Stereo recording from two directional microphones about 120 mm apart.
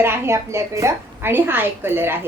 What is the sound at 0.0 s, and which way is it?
A woman's voice, 20° right (ahead or behind).